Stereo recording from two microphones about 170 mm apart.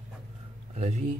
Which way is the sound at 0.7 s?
40° right (ahead or behind).